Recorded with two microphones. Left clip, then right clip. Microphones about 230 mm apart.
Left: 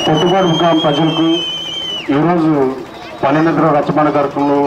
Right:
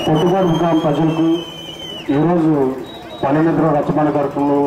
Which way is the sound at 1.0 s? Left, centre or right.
Left.